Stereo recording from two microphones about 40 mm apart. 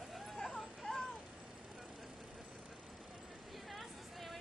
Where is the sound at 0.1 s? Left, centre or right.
Centre.